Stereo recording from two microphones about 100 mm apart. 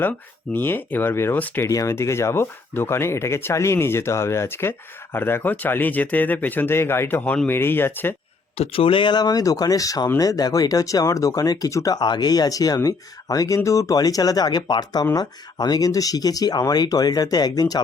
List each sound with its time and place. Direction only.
0.5 s speech: 20° left (ahead or behind)
1.6 s speech: 30° left (ahead or behind)
8.5 s speech: 80° left; by 17.7 s 40° left (ahead or behind)